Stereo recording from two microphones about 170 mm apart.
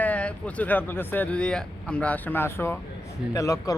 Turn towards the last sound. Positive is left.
turn(degrees=20)  # may be behind; listen again after turning